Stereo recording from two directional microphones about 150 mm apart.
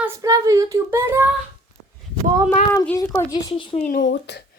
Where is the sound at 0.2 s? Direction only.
20° right (ahead or behind).